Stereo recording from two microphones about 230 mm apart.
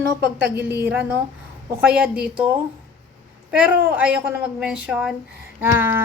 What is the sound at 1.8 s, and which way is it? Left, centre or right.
Speech, centre.